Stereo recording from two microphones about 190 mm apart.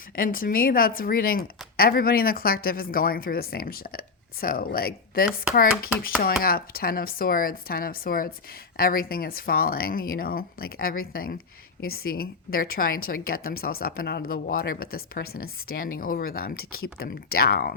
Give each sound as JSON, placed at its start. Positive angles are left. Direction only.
{"t": 0.2, "sound": "speech", "side_deg": 50}
{"t": 6.4, "sound": "speech", "side_deg": 50}